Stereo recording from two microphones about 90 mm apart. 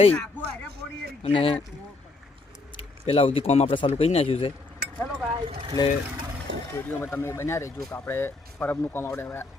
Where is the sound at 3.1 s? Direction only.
90° left.